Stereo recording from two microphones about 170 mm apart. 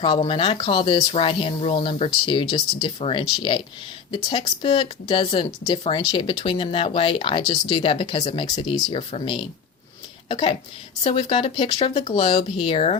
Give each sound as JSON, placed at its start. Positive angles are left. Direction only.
{"t": 0.0, "sound": "speech", "side_deg": 30}